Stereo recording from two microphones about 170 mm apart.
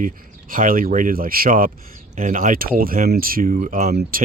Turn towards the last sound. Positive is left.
turn(degrees=-45)  # may be behind; listen again after turning